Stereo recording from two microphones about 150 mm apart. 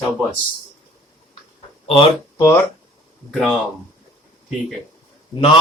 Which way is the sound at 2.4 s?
15° left (ahead or behind).